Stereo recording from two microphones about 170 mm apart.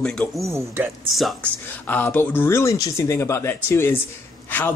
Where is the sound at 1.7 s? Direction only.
10° left (ahead or behind).